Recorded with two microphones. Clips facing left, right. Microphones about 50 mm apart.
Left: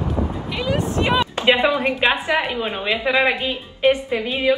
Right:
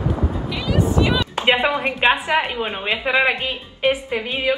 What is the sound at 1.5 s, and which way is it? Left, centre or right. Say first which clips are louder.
A woman's voice: left 1 dB; centre.